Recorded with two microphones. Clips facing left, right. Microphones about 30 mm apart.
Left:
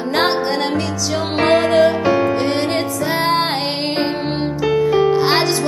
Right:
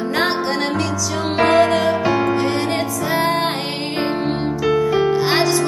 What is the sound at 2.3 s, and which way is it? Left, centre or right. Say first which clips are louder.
Music: left 1 dB; left.